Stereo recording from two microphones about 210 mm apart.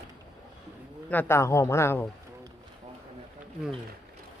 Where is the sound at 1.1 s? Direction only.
10° left (ahead or behind).